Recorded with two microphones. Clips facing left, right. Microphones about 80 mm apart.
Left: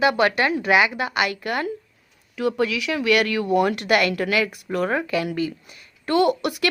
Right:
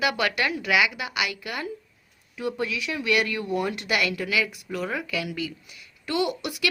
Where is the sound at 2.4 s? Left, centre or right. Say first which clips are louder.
Left 6 dB; left.